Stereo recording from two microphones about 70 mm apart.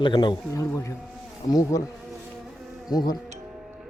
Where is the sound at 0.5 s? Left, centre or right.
Left.